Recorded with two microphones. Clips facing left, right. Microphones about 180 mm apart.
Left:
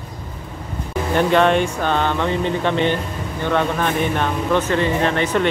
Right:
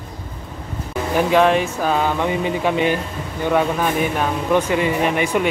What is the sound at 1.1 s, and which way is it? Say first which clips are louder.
Speech: even; 5° right (ahead or behind).